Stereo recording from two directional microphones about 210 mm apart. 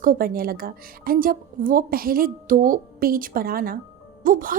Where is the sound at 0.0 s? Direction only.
45° right (ahead or behind).